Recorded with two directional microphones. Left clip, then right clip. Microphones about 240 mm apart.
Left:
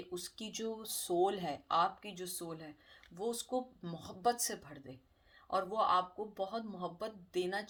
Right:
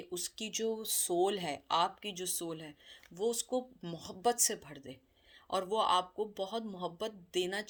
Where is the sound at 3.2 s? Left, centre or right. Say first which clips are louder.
Right 4 dB; right.